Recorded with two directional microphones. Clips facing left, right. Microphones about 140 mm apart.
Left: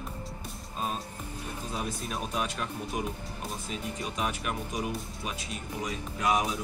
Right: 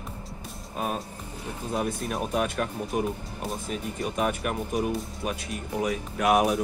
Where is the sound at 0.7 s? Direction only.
65° right (ahead or behind).